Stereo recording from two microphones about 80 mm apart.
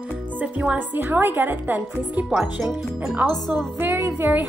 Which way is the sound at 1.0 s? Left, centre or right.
Right.